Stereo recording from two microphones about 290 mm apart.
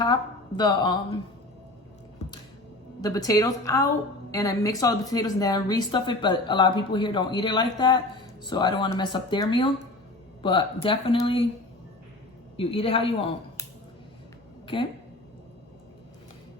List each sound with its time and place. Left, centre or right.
0.0 s speech: centre
3.0 s speech: centre
12.5 s speech: centre